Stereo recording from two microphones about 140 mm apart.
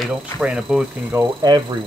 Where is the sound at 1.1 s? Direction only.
20° right (ahead or behind).